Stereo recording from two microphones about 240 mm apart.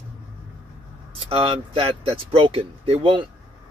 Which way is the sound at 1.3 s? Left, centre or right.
Right.